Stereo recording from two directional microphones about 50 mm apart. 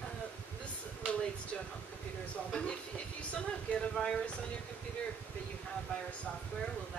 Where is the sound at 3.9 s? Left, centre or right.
Centre.